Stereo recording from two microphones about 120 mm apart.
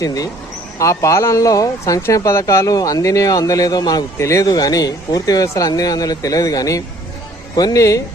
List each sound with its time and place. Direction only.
0.0 s speech: 30° left (ahead or behind)